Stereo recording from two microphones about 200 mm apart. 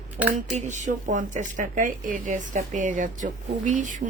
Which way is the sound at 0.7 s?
35° right (ahead or behind).